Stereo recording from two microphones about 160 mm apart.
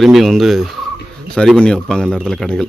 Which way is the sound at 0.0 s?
Centre (ahead or behind).